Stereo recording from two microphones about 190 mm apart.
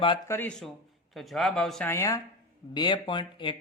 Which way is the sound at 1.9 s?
15° left (ahead or behind).